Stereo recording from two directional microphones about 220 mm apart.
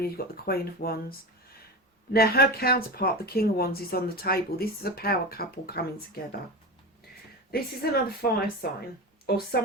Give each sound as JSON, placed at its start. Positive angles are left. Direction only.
{"t": 0.0, "sound": "speech", "side_deg": 45}
{"t": 2.1, "sound": "speech", "side_deg": 45}
{"t": 7.5, "sound": "speech", "side_deg": 45}